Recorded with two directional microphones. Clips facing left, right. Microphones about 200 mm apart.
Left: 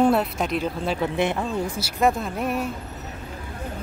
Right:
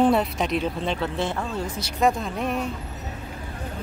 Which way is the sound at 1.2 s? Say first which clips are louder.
Left 3 dB; 20° left (ahead or behind).